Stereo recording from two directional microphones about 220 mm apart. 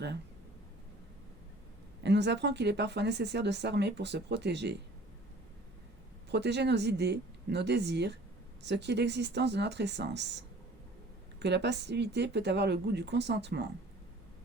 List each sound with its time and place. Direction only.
2.0 s speech: 50° right (ahead or behind)
6.3 s speech: 50° right (ahead or behind)
11.3 s speech: 50° right (ahead or behind)